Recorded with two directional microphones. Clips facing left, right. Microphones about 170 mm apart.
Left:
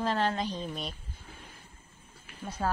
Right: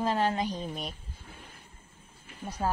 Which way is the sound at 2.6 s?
15° right (ahead or behind).